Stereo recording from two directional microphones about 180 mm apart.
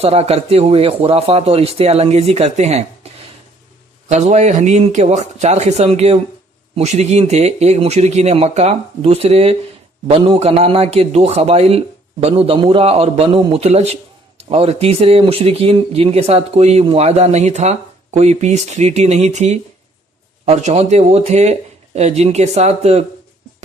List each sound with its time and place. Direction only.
0.0 s speech: 35° right (ahead or behind)
4.1 s speech: 40° right (ahead or behind)